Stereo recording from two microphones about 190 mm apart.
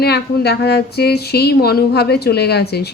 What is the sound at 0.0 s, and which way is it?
A woman's voice, 60° left (ahead or behind).